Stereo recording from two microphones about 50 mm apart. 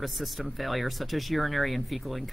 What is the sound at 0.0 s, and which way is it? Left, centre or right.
Speech, centre.